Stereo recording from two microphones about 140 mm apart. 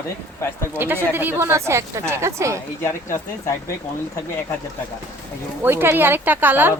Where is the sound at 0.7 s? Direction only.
15° right (ahead or behind).